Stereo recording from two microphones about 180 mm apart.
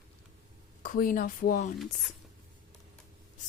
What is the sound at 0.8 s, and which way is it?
Speech, 50° left (ahead or behind).